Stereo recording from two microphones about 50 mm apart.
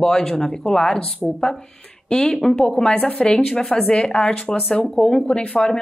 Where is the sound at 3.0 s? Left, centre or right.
Left.